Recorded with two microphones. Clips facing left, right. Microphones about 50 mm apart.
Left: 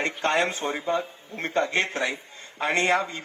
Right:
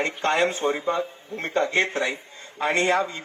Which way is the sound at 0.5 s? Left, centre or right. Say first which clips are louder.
Right 3 dB; right.